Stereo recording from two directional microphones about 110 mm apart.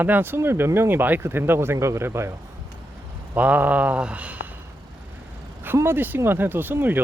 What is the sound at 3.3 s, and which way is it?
Speech, 15° right (ahead or behind).